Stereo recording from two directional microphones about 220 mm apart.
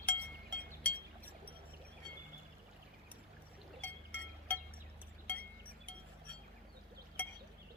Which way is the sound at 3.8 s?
5° left (ahead or behind).